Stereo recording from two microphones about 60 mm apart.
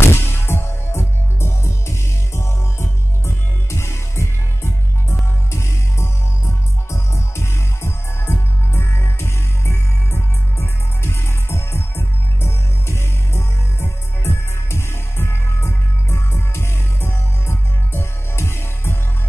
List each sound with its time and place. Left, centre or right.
0.0 s music: left